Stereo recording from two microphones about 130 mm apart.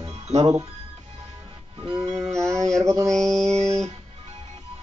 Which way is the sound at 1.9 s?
35° right (ahead or behind).